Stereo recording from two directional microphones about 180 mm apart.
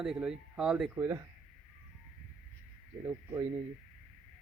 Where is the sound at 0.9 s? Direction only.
15° right (ahead or behind).